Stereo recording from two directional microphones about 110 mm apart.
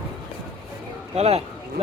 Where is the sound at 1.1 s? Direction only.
75° right (ahead or behind).